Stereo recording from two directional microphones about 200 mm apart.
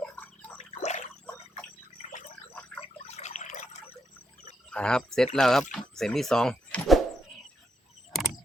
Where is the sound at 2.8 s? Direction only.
30° left (ahead or behind).